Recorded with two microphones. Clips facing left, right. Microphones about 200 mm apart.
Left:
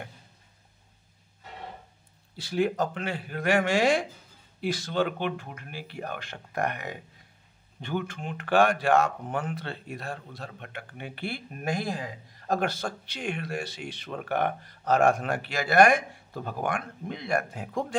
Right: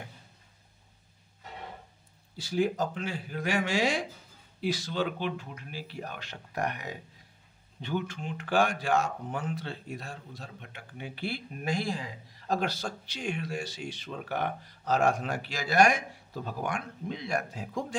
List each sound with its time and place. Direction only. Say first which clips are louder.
2.3 s speech: left 2 dB; 60° left (ahead or behind)